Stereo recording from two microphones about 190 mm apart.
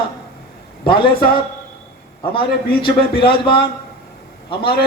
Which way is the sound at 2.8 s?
25° left (ahead or behind).